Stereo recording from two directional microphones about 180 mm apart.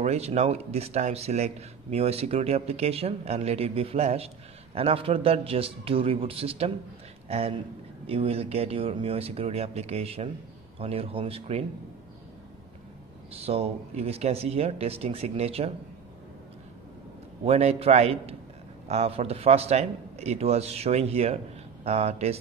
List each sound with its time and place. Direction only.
0.0 s speech: 35° right (ahead or behind)
13.3 s speech: 35° right (ahead or behind)
17.5 s speech: 35° right (ahead or behind)